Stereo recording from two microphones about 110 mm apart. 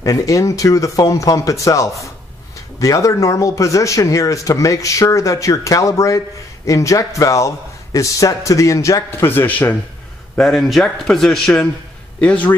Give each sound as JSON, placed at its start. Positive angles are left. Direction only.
{"t": 0.0, "sound": "speech", "side_deg": 30}
{"t": 10.3, "sound": "a man's voice", "side_deg": 0}